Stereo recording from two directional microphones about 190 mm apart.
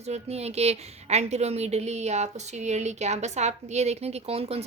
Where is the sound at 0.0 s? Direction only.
35° right (ahead or behind).